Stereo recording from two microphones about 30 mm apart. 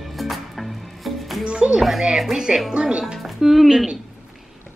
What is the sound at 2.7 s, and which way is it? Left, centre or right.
Speech, right.